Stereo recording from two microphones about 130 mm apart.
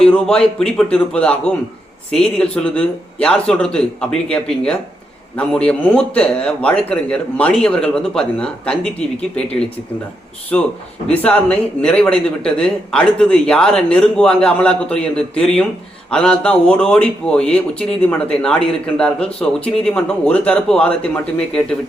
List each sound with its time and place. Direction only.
0.0 s speech: 5° left (ahead or behind)
11.1 s speech: 10° left (ahead or behind)